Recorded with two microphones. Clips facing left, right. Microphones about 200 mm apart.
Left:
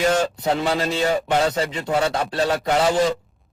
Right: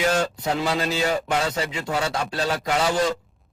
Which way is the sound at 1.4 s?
30° left (ahead or behind).